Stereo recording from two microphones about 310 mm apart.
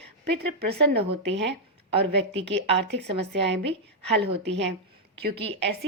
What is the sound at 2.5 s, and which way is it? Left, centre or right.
Speech, right.